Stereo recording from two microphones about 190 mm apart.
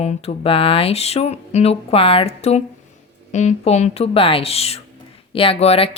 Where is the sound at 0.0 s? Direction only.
35° left (ahead or behind).